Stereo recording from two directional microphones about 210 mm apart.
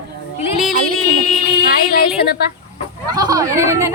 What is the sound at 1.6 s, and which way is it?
Speech, 45° left (ahead or behind).